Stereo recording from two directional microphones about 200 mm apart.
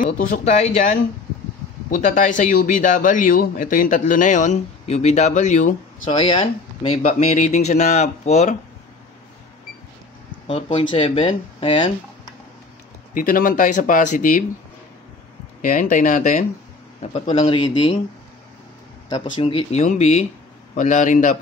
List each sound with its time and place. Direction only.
0.0 s a man's voice: 40° left (ahead or behind)
6.0 s a man's voice: 25° left (ahead or behind)
10.4 s speech: 25° left (ahead or behind)
13.1 s a man's voice: 45° left (ahead or behind)
15.6 s a man's voice: 40° left (ahead or behind); by 17.9 s 25° left (ahead or behind)
19.3 s a man's voice: 30° left (ahead or behind)